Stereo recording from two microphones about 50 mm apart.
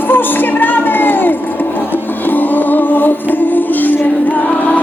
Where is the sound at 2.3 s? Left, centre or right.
Left.